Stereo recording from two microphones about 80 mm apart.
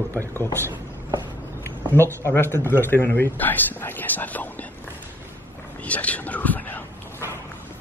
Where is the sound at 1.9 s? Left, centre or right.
Left.